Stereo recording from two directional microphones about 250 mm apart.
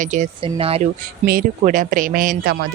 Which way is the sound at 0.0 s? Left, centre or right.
Right.